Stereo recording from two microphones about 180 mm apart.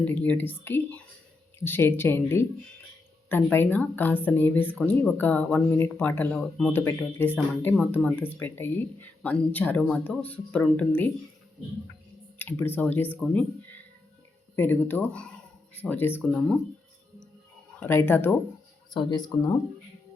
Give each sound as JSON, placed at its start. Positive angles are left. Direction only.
{"t": 0.0, "sound": "speech", "side_deg": 10}
{"t": 12.4, "sound": "speech", "side_deg": 10}
{"t": 14.5, "sound": "speech", "side_deg": 10}
{"t": 17.7, "sound": "speech", "side_deg": 10}
{"t": 18.9, "sound": "speech", "side_deg": 25}